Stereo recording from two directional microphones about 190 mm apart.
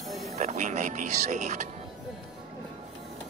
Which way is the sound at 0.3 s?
40° right (ahead or behind).